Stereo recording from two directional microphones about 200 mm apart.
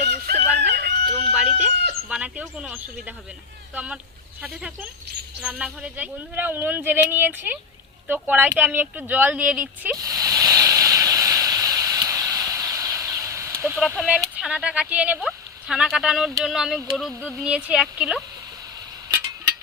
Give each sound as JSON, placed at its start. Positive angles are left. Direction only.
{"t": 0.0, "sound": "fowl", "side_deg": -55}
{"t": 0.7, "sound": "chicken", "side_deg": -55}
{"t": 1.3, "sound": "a sound", "side_deg": -5}
{"t": 4.4, "sound": "speech", "side_deg": -5}
{"t": 10.0, "sound": "a sound", "side_deg": -20}
{"t": 13.7, "sound": "speech", "side_deg": 0}